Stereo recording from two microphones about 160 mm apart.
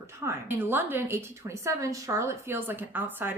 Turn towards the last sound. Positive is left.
turn(degrees=-15)  # may be behind; listen again after turning